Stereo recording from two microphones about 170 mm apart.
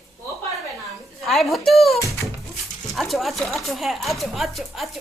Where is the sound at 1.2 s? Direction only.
Centre (ahead or behind).